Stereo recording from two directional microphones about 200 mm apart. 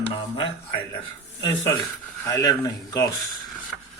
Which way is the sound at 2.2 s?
15° left (ahead or behind).